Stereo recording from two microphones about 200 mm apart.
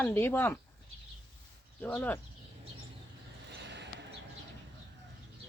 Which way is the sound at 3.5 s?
60° right (ahead or behind).